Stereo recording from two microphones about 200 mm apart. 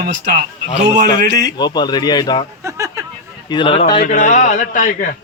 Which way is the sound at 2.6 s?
15° right (ahead or behind).